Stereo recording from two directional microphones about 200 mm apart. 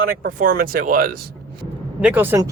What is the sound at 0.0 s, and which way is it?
Speech, 45° right (ahead or behind).